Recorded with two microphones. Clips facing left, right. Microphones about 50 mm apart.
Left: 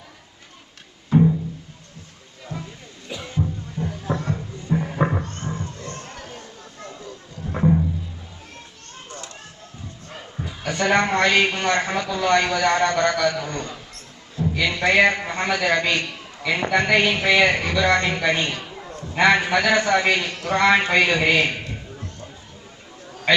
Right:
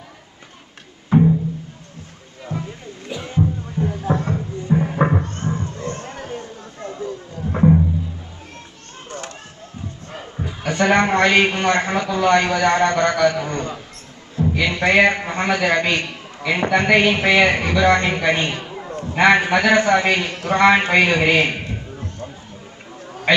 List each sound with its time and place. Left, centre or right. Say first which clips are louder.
1.1 s music: right 2 dB; right
2.4 s music: right 6 dB; centre
9.0 s children playing: right 6 dB; right
10.1 s a man's voice: right 3 dB; centre
23.0 s chatter: right 3 dB; centre